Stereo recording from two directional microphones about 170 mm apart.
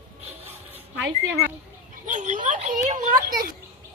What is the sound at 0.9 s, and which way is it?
Speech, 90° right.